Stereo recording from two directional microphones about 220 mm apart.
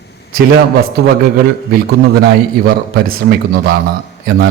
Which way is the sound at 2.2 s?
45° right (ahead or behind).